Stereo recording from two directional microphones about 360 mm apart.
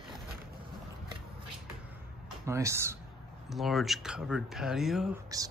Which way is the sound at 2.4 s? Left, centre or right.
Centre.